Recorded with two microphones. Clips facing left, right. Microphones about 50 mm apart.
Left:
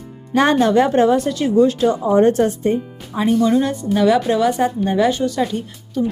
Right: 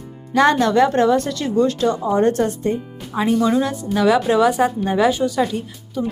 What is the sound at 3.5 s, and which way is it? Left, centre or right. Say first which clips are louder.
A woman's voice: left 2 dB; centre.